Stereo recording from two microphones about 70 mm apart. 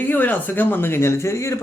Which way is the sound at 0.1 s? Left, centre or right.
Left.